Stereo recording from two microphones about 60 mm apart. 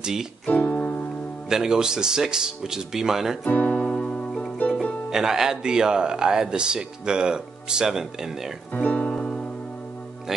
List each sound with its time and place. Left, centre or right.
0.0 s speech: centre
0.5 s music: left
1.5 s speech: centre
3.4 s music: left
5.1 s speech: centre
8.7 s music: left